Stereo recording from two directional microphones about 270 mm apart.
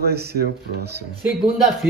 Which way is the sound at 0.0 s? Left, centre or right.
Right.